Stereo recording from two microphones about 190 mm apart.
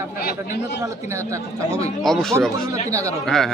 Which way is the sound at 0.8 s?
15° right (ahead or behind).